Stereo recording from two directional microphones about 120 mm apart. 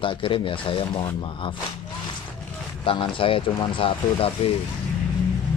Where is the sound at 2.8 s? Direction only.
45° left (ahead or behind).